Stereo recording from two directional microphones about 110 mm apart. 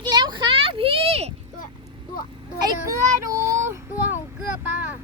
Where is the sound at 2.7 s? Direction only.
30° right (ahead or behind).